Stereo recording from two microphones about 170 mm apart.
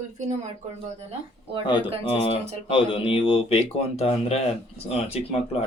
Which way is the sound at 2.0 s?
35° left (ahead or behind).